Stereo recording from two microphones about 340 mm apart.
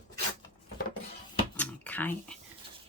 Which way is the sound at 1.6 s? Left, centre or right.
Centre.